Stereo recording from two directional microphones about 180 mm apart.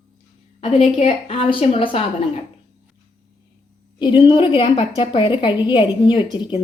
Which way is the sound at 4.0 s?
25° left (ahead or behind).